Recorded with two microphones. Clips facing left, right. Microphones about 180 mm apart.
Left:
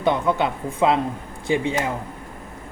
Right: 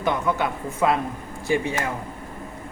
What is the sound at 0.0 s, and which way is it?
A woman's voice, 25° left (ahead or behind).